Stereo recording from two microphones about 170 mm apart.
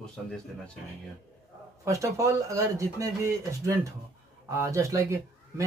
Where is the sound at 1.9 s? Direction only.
20° right (ahead or behind).